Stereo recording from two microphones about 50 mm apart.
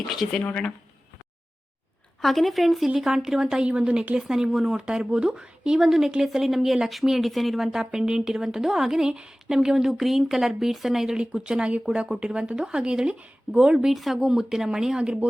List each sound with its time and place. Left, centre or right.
0.2 s speech: centre
2.2 s a woman's voice: centre
2.9 s speech: centre
3.7 s speech: right
4.2 s speech: centre